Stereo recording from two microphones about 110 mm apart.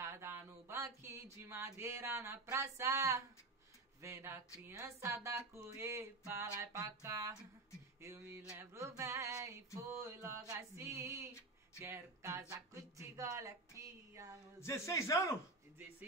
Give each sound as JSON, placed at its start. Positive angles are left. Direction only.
{"t": 0.0, "sound": "speech", "side_deg": -25}
{"t": 4.0, "sound": "a sound", "side_deg": -25}
{"t": 11.8, "sound": "speech", "side_deg": -25}
{"t": 14.6, "sound": "a man's voice", "side_deg": 25}